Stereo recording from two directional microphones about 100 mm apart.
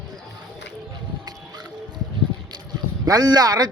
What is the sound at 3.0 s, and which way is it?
Speech, 40° right (ahead or behind).